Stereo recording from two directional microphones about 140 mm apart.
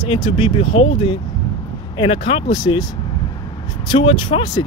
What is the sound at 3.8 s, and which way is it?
Speech, 35° left (ahead or behind).